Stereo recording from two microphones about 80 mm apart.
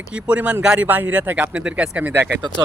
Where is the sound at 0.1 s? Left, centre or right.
Centre.